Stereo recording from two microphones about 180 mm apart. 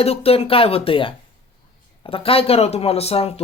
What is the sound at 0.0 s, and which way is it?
Speech, 35° left (ahead or behind).